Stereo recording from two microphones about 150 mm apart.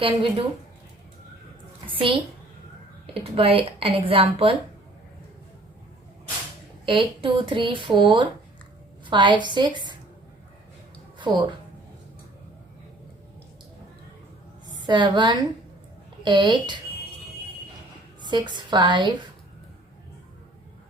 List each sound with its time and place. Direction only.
0.0 s speech: 35° right (ahead or behind)
1.9 s a sound: 35° right (ahead or behind)
3.3 s speech: 40° right (ahead or behind)
6.8 s speech: 35° right (ahead or behind)
11.2 s speech: 30° right (ahead or behind)
14.8 s a woman's voice: 30° right (ahead or behind)
18.2 s a woman's voice: 30° right (ahead or behind)